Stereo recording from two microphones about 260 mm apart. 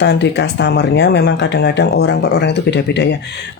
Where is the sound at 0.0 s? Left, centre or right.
Left.